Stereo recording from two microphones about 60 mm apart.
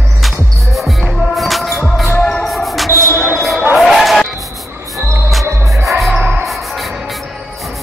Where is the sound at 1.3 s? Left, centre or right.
Centre.